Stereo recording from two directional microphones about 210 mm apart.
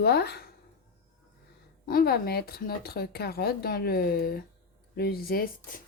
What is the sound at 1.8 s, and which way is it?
Speech, 45° left (ahead or behind).